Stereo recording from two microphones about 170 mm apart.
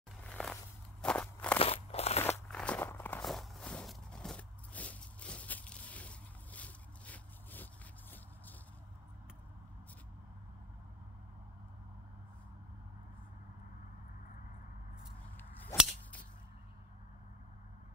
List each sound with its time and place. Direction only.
0.2 s a sound: 5° left (ahead or behind)
1.0 s walk: 5° left (ahead or behind)
1.6 s crunch: 35° left (ahead or behind)
2.4 s walk: 5° left (ahead or behind)
15.7 s cap gun: 15° left (ahead or behind)